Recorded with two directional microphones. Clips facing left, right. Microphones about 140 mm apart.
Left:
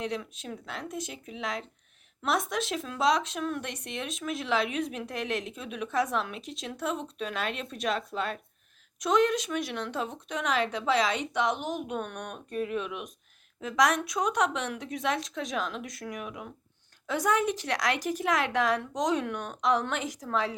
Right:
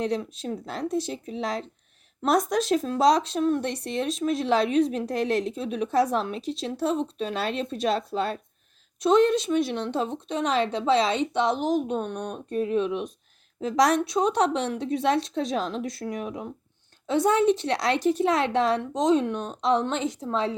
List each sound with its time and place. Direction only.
0.0 s a woman's voice: 35° right (ahead or behind)